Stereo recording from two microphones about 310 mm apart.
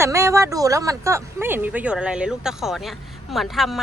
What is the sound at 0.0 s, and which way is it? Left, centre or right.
Speech, centre.